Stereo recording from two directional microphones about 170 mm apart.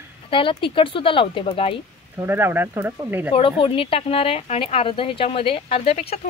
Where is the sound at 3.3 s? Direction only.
30° left (ahead or behind).